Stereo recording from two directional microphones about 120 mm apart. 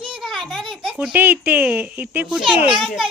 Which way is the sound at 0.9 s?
10° right (ahead or behind).